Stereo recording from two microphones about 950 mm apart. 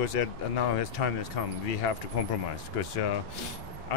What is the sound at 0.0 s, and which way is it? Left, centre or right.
Speech, left.